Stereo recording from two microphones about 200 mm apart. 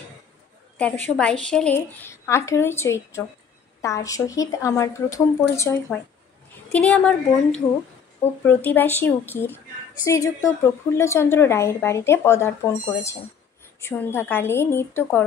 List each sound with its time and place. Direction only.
0.7 s a woman's voice: 5° left (ahead or behind)